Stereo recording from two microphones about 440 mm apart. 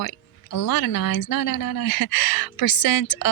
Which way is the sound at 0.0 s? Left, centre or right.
Left.